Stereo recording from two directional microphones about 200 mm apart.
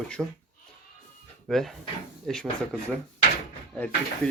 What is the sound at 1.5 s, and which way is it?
Speech, centre (ahead or behind).